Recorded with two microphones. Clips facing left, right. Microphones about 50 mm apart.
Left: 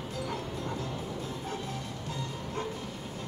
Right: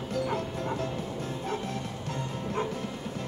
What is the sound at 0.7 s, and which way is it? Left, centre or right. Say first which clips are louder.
Music: right 3 dB; right.